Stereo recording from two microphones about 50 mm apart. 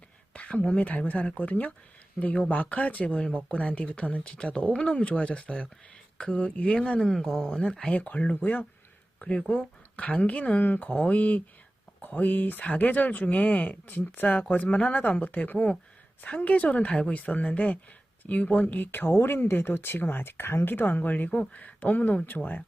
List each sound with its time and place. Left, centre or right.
0.3 s a sound: left
0.8 s speech: left
7.0 s speech: centre
7.9 s speech: left
9.5 s speech: centre
10.0 s speech: left
15.5 s speech: left